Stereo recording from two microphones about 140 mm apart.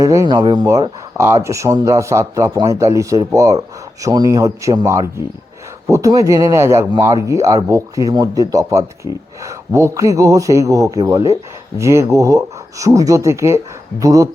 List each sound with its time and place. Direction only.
0.0 s speech: 25° right (ahead or behind)